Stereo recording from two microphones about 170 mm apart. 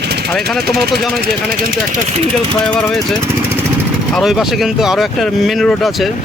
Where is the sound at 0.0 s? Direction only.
75° right (ahead or behind).